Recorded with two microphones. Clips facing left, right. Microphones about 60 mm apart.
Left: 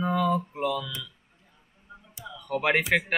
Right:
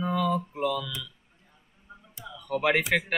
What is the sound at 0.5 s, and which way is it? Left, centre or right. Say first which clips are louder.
Speech: even; centre.